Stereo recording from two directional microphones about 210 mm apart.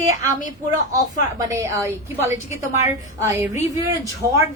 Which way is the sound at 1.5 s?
15° right (ahead or behind).